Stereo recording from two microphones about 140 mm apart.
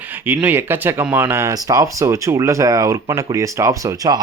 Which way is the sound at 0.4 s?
15° right (ahead or behind).